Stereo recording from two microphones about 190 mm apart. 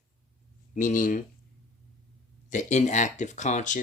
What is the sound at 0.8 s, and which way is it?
Speech, 45° left (ahead or behind).